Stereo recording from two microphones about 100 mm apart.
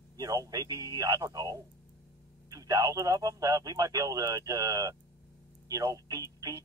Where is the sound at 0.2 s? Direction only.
40° right (ahead or behind).